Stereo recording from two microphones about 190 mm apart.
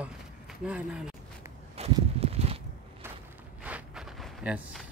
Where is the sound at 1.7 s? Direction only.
30° right (ahead or behind).